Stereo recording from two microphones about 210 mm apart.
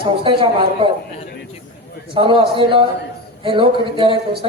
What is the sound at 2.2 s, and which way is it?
A man's voice, 25° right (ahead or behind).